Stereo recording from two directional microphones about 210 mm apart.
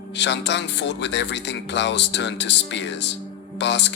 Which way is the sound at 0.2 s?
55° left (ahead or behind).